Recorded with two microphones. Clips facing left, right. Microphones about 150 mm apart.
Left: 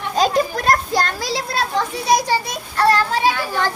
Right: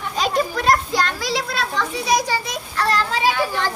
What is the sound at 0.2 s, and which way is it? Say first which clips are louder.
Children playing: left 3 dB; 45° left (ahead or behind).